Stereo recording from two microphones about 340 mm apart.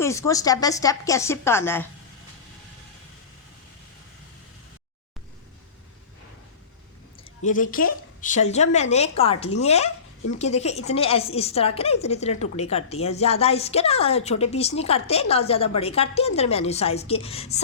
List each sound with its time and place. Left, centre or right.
0.0 s speech: centre
7.4 s speech: left